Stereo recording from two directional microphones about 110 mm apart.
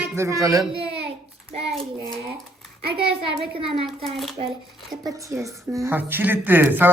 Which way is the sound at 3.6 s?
60° right (ahead or behind).